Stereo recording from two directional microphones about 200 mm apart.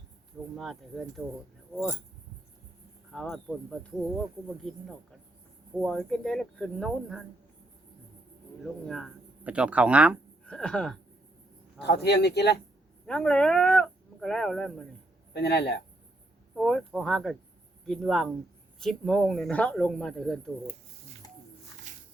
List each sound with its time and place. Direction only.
0.5 s speech: centre (ahead or behind)
3.1 s speech: centre (ahead or behind)
5.8 s speech: centre (ahead or behind)
8.6 s speech: 5° left (ahead or behind)
10.4 s speech: 5° left (ahead or behind)
11.9 s speech: 55° left (ahead or behind)
13.1 s speech: 5° left (ahead or behind)
15.3 s speech: 55° left (ahead or behind)
16.6 s speech: centre (ahead or behind)